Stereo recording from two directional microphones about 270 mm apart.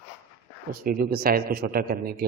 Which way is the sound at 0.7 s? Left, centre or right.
Right.